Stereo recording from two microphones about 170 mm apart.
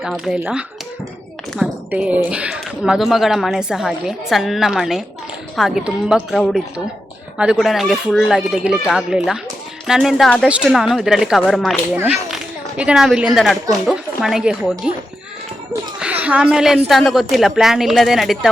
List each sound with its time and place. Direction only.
0.0 s a woman's voice: 5° right (ahead or behind)
16.2 s a woman's voice: 5° right (ahead or behind)